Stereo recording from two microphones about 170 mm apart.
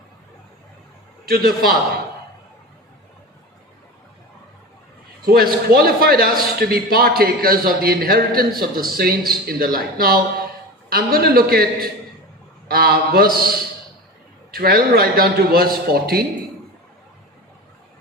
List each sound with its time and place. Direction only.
1.3 s a man's voice: 60° right (ahead or behind)
5.2 s a man's voice: 60° right (ahead or behind)